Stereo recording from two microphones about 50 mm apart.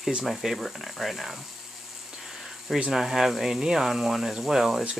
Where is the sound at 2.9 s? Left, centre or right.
Centre.